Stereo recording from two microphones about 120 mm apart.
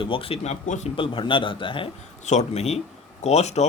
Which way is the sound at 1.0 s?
45° left (ahead or behind).